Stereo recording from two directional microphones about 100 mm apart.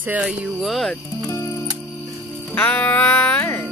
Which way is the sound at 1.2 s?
30° left (ahead or behind).